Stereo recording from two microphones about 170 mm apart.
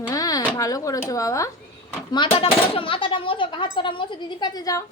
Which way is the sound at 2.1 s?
30° left (ahead or behind).